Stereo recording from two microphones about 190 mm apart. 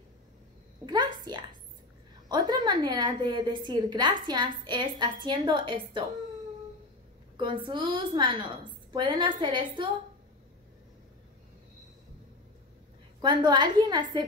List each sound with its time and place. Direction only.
0.8 s a sound: 25° right (ahead or behind)
2.2 s a woman's voice: 20° right (ahead or behind)
7.3 s a woman's voice: 25° right (ahead or behind)
13.2 s a woman's voice: 25° right (ahead or behind)